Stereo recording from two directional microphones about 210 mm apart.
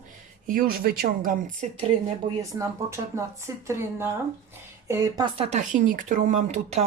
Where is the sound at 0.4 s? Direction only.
40° right (ahead or behind).